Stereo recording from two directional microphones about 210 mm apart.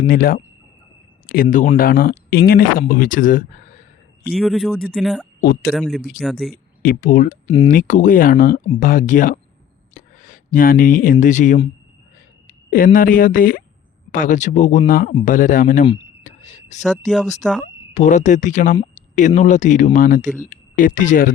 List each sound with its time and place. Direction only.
0.0 s speech: 45° left (ahead or behind)
4.3 s speech: centre (ahead or behind)
6.8 s speech: 40° left (ahead or behind)
12.7 s speech: 40° left (ahead or behind)
16.2 s whispering: 35° left (ahead or behind)
17.1 s speech: centre (ahead or behind)
17.9 s speech: 35° left (ahead or behind)